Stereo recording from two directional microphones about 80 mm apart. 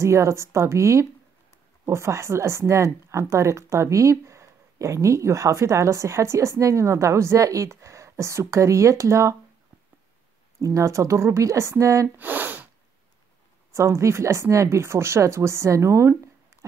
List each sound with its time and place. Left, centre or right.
0.0 s speech: right
10.6 s speech: right
12.2 s sniff: right
13.7 s speech: right